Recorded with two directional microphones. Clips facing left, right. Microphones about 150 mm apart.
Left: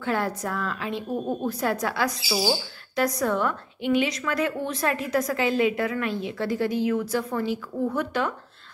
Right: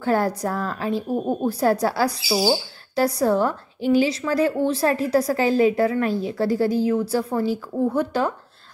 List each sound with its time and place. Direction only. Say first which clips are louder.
0.0 s a woman's voice: right 5 dB; 40° right (ahead or behind)